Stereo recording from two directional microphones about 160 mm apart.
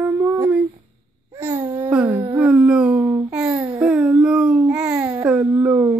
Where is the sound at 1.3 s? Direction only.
15° right (ahead or behind).